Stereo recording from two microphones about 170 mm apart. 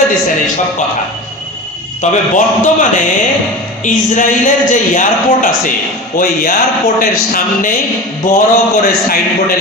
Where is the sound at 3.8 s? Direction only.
50° left (ahead or behind).